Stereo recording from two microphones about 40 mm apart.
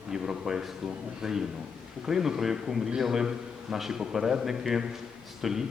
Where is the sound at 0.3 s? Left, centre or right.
Centre.